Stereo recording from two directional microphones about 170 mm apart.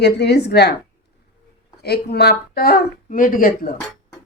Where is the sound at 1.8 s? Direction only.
70° left (ahead or behind).